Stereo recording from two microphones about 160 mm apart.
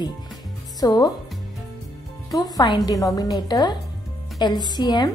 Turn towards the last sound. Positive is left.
turn(degrees=25)  # may be behind; listen again after turning